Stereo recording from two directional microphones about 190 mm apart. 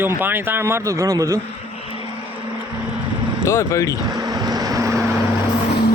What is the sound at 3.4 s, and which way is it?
Speech, 15° left (ahead or behind).